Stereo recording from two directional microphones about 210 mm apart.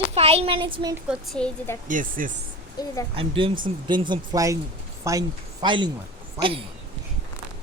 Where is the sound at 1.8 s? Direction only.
40° right (ahead or behind).